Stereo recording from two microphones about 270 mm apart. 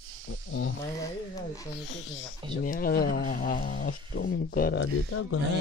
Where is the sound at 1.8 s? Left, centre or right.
Left.